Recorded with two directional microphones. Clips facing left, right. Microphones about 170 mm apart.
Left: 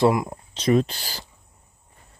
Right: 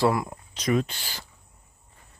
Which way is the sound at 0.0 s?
20° left (ahead or behind).